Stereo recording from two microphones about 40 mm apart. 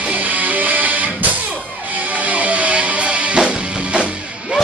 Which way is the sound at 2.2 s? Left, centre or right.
Right.